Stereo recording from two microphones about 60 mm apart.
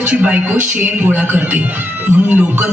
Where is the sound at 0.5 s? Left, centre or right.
Right.